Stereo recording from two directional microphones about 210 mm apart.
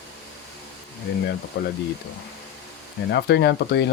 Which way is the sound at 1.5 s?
50° left (ahead or behind).